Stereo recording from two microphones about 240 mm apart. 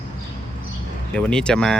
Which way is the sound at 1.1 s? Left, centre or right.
Centre.